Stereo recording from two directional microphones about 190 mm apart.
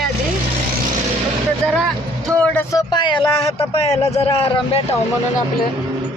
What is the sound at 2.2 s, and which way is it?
Speech, 5° left (ahead or behind).